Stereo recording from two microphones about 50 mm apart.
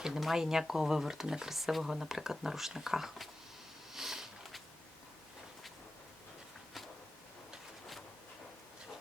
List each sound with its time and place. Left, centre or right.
0.0 s speech: centre
3.9 s sniff: centre